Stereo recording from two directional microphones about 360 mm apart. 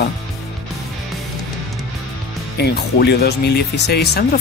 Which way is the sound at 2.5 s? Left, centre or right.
Left.